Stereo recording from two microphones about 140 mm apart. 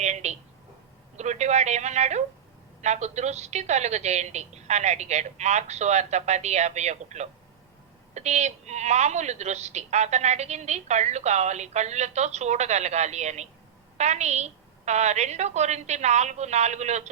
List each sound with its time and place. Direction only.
0.0 s a woman's voice: 55° right (ahead or behind)